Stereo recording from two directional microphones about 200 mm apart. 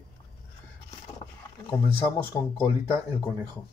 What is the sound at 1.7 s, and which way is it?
Speech, 20° left (ahead or behind).